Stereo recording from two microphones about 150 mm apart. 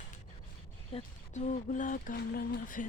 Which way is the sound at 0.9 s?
45° left (ahead or behind).